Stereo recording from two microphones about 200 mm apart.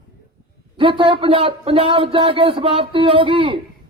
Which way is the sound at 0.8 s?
25° right (ahead or behind).